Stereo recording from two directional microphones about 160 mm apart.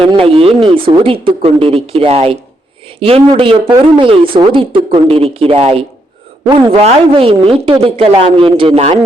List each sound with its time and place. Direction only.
0.0 s speech: 35° right (ahead or behind)